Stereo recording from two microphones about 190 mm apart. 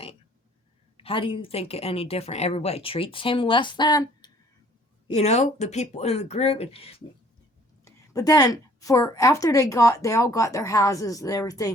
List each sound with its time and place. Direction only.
0.9 s a woman's voice: 30° left (ahead or behind)
5.1 s speech: 35° left (ahead or behind)
7.9 s a woman's voice: 20° left (ahead or behind)